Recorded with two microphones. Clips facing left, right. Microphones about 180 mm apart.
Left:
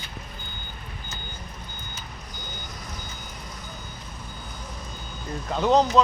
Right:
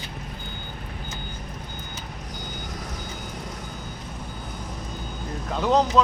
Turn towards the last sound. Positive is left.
turn(degrees=-5)  # may be behind; listen again after turning